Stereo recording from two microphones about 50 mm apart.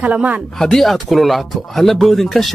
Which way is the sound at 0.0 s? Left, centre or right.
Right.